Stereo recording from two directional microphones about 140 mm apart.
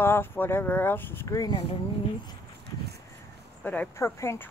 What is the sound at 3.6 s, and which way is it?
Speech, 10° left (ahead or behind).